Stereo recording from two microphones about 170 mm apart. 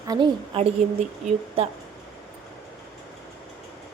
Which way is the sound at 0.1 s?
30° right (ahead or behind).